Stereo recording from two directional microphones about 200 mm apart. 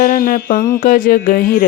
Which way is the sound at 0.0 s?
45° left (ahead or behind).